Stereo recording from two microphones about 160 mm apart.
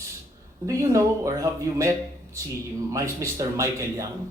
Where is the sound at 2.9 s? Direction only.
20° right (ahead or behind).